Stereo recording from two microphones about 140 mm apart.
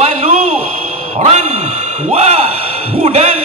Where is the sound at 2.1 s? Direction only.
45° right (ahead or behind).